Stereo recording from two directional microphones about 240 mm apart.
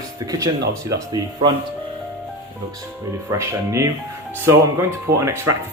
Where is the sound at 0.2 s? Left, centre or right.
Centre.